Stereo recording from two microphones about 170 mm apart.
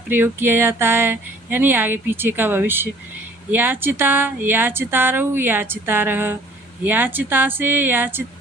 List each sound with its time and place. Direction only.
0.1 s speech: 10° right (ahead or behind)